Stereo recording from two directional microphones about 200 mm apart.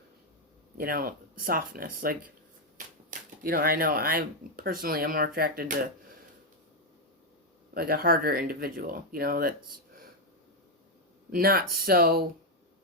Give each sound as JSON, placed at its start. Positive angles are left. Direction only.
{"t": 0.8, "sound": "speech", "side_deg": -45}
{"t": 7.7, "sound": "speech", "side_deg": -50}
{"t": 11.3, "sound": "speech", "side_deg": -45}